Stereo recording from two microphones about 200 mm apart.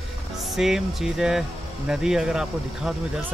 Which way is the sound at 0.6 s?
Centre (ahead or behind).